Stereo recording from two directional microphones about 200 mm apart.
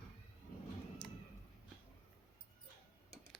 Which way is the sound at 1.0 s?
5° left (ahead or behind).